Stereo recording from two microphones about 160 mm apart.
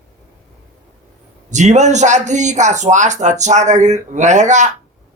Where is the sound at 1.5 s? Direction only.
50° right (ahead or behind).